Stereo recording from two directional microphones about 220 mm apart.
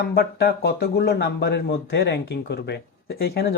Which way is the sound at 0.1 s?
45° left (ahead or behind).